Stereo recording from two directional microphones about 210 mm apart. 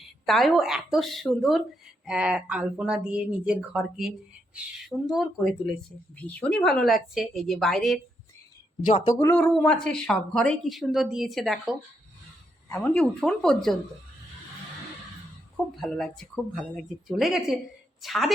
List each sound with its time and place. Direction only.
0.3 s speech: centre (ahead or behind)
8.9 s speech: 30° left (ahead or behind)
9.1 s speech: 10° left (ahead or behind)
12.6 s speech: 10° left (ahead or behind)
15.8 s speech: centre (ahead or behind)